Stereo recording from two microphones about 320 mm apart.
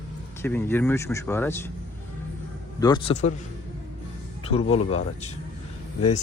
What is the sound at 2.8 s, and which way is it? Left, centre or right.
Speech, centre.